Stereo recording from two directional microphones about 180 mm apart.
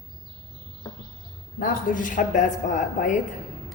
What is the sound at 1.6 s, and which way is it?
A woman's voice, 50° left (ahead or behind).